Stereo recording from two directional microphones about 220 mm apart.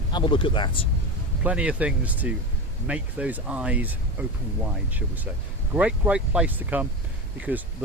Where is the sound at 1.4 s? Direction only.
5° right (ahead or behind).